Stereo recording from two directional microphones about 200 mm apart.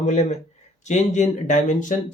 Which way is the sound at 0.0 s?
35° left (ahead or behind).